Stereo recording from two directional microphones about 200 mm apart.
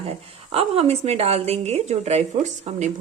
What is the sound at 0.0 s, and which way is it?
Speech, 30° right (ahead or behind).